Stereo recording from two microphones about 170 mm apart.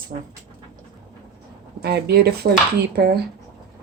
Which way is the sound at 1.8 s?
70° right (ahead or behind).